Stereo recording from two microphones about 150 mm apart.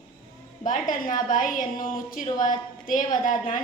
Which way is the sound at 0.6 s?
60° left (ahead or behind).